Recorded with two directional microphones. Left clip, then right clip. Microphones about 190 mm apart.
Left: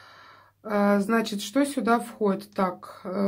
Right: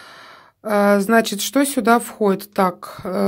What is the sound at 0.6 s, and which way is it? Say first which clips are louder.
Speech: right 8 dB; 40° right (ahead or behind).